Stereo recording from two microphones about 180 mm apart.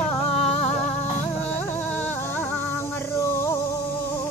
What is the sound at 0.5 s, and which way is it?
Music, 5° left (ahead or behind).